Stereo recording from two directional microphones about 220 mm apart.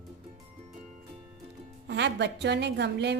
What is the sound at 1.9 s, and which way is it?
A woman's voice, 50° right (ahead or behind).